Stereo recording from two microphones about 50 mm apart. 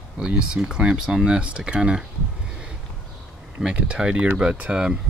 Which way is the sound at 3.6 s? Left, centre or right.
Centre.